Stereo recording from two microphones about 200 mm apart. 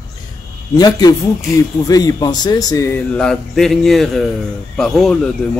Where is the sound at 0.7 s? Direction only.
20° left (ahead or behind); by 5.2 s centre (ahead or behind).